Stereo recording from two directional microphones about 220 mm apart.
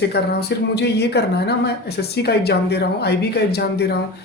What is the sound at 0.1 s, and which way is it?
Speech, 50° left (ahead or behind).